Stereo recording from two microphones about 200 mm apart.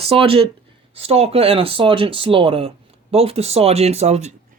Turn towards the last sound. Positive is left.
turn(degrees=-35)  # may be behind; listen again after turning